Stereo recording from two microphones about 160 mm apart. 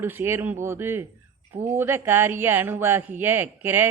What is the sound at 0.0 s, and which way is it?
Speech, 15° right (ahead or behind).